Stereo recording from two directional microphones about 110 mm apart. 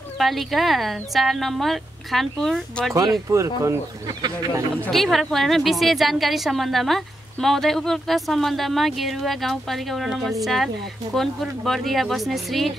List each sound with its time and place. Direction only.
0.2 s a woman's voice: centre (ahead or behind)
3.3 s speech: 25° right (ahead or behind)
4.2 s a man's voice: 35° right (ahead or behind)
4.9 s a woman's voice: centre (ahead or behind)